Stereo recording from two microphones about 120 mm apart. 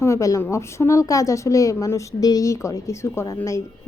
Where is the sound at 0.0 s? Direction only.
25° left (ahead or behind).